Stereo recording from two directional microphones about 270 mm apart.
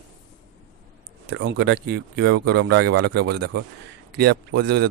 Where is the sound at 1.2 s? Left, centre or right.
Right.